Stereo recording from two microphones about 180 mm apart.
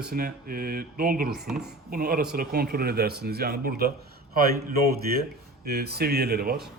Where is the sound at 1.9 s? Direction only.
55° right (ahead or behind).